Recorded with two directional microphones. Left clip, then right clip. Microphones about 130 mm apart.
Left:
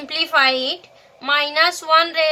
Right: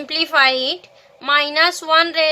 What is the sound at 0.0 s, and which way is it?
A woman's voice, 40° right (ahead or behind).